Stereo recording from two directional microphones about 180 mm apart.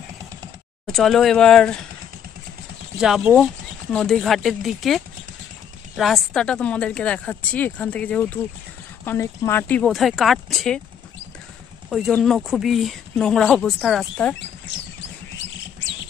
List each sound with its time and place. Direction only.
0.9 s speech: centre (ahead or behind)
3.0 s speech: 5° right (ahead or behind)
11.9 s speech: 5° left (ahead or behind)
14.7 s a sound: 80° left